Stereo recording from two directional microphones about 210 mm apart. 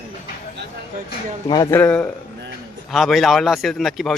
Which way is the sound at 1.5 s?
15° left (ahead or behind).